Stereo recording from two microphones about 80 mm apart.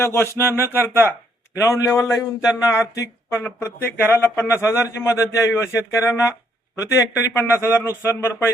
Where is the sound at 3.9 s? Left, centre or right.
Left.